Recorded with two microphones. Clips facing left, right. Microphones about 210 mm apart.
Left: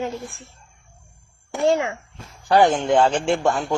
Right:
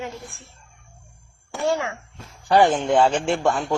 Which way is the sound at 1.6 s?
15° left (ahead or behind).